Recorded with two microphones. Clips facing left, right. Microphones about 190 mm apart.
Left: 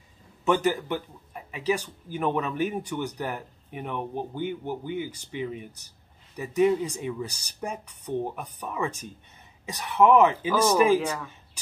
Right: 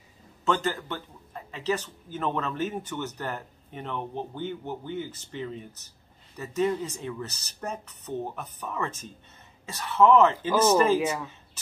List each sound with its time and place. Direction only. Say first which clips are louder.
0.5 s speech: left 4 dB; 15° left (ahead or behind)
11.1 s speech: right 1 dB; 15° right (ahead or behind)